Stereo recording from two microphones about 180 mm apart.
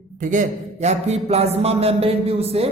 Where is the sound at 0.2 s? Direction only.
45° right (ahead or behind).